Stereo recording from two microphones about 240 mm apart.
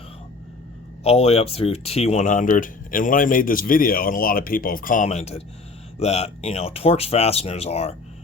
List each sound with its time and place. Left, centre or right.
1.0 s speech: left